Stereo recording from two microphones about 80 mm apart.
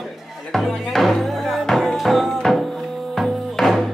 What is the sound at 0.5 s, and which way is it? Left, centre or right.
Music, centre.